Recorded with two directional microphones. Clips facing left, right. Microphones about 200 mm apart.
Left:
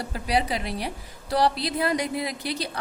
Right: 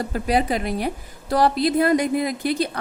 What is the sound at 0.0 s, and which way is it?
A woman's voice, 50° right (ahead or behind).